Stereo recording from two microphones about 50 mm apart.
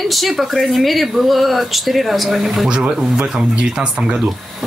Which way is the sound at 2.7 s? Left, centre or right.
Centre.